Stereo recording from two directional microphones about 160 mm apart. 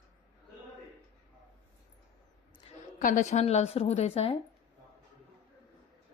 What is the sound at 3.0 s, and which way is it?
A woman's voice, 55° left (ahead or behind).